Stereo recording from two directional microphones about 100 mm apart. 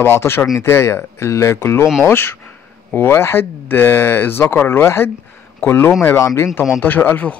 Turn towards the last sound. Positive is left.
turn(degrees=15)  # may be behind; listen again after turning